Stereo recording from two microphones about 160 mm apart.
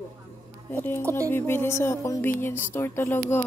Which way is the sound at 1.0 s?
20° right (ahead or behind).